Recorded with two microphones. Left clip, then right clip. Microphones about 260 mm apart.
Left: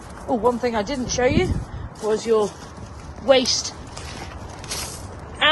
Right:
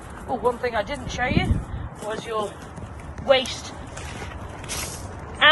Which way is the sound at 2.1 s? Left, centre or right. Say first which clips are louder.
Left 8 dB; left.